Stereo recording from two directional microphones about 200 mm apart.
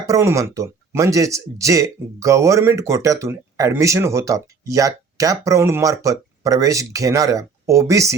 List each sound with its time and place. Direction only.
0.0 s speech: 15° right (ahead or behind)